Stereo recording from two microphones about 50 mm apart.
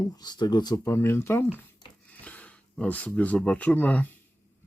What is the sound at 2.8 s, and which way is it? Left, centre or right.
Speech, left.